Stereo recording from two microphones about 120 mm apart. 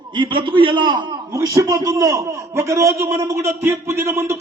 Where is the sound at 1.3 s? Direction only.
25° right (ahead or behind).